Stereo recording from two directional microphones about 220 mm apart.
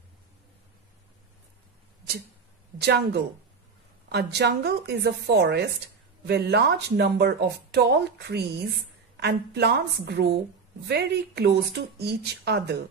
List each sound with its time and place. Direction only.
2.8 s speech: 50° right (ahead or behind)